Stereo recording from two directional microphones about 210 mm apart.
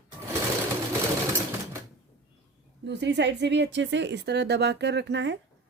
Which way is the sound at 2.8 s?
55° right (ahead or behind).